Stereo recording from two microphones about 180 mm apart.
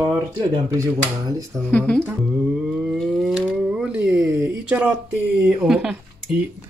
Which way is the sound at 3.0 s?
5° right (ahead or behind).